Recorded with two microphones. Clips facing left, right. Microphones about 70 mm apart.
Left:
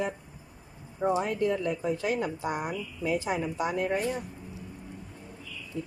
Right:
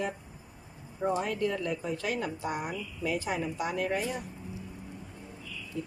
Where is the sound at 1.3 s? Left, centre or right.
Left.